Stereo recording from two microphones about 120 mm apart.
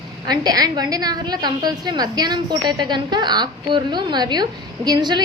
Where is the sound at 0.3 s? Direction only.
35° right (ahead or behind).